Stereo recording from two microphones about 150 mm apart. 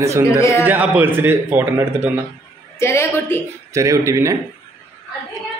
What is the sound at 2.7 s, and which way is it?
Speech, 15° left (ahead or behind).